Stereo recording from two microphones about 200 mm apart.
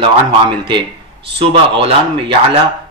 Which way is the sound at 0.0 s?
25° right (ahead or behind).